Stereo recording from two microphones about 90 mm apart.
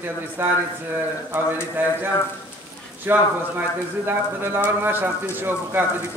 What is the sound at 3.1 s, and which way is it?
A man's voice, 25° right (ahead or behind).